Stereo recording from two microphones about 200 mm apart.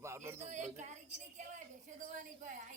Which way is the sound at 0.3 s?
35° right (ahead or behind).